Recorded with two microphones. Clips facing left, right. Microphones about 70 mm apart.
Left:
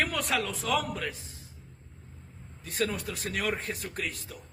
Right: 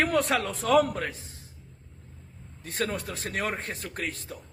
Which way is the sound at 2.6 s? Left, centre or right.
Right.